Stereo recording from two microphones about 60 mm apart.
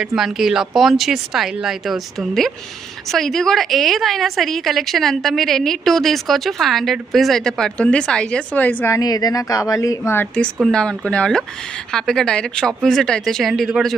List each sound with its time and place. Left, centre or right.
0.1 s a woman's voice: centre
7.8 s speech: centre
8.5 s a woman's voice: left
9.0 s speech: left
10.0 s a woman's voice: left
10.7 s speech: centre